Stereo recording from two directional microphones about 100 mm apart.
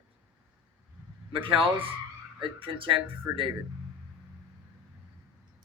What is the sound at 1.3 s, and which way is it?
Speech, 60° right (ahead or behind).